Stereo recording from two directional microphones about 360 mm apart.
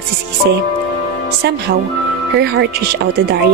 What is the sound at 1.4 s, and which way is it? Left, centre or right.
Speech, right.